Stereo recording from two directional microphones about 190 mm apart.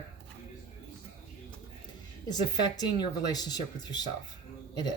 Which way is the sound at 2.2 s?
20° left (ahead or behind).